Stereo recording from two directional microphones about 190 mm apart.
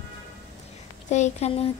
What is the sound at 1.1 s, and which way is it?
Speech, 35° left (ahead or behind).